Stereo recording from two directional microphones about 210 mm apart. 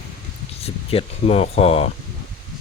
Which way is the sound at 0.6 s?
30° left (ahead or behind).